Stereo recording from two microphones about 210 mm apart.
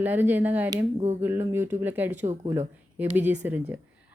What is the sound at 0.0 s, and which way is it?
Speech, 10° right (ahead or behind).